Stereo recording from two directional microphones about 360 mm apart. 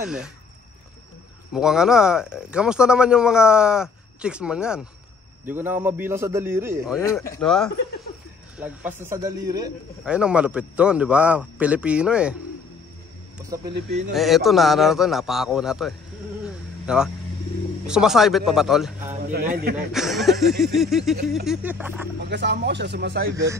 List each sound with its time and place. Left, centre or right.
1.5 s a man's voice: centre
7.0 s a man's voice: centre
13.5 s speech: centre
14.1 s a man's voice: centre
19.2 s speech: right
19.9 s a man's voice: centre
22.2 s speech: right